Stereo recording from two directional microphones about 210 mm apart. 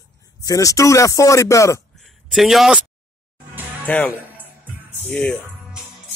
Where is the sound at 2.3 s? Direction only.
Centre (ahead or behind).